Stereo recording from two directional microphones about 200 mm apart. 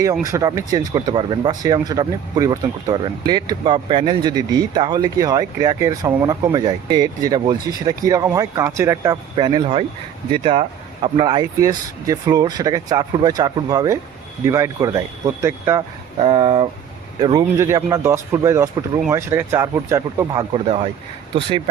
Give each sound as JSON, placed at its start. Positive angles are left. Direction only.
{"t": 0.3, "sound": "speech", "side_deg": -15}
{"t": 9.3, "sound": "speech", "side_deg": -25}